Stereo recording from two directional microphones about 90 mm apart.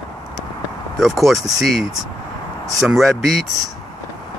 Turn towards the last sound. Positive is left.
turn(degrees=0)  # may be behind; listen again after turning